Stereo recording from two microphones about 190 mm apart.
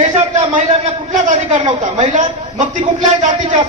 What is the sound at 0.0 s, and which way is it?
A man's voice, 35° right (ahead or behind).